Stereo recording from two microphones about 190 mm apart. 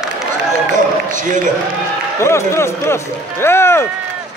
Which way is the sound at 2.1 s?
15° left (ahead or behind).